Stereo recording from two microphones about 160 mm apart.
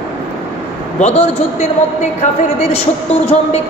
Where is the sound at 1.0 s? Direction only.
40° left (ahead or behind).